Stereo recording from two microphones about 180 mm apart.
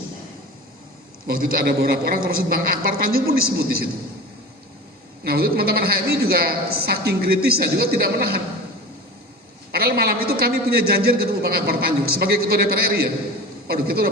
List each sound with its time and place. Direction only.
1.3 s a man's voice: 50° right (ahead or behind)
5.2 s a man's voice: 60° right (ahead or behind)
9.7 s a man's voice: 60° right (ahead or behind)